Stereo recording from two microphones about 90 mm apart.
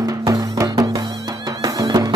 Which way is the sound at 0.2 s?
40° right (ahead or behind).